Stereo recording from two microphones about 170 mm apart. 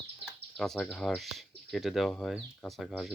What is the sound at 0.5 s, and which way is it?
Speech, 5° left (ahead or behind).